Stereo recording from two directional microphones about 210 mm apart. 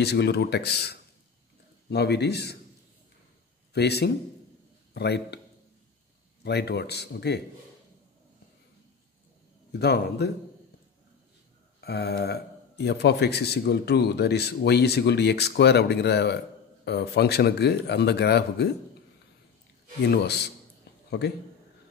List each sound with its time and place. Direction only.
0.0 s a man's voice: 50° left (ahead or behind)
3.7 s a man's voice: 50° left (ahead or behind)
6.4 s a man's voice: 50° left (ahead or behind)
9.7 s a man's voice: 50° left (ahead or behind)
11.8 s a man's voice: 50° left (ahead or behind)
20.1 s a man's voice: 50° left (ahead or behind)
20.9 s a sound: 55° left (ahead or behind)